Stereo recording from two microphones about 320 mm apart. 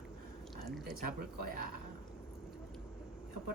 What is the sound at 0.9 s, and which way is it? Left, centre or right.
Speech, right.